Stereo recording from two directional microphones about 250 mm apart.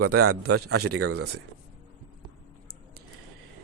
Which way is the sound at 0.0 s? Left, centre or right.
Right.